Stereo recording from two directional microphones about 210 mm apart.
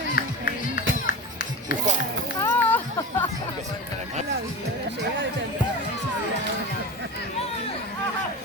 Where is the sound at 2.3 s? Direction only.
10° left (ahead or behind).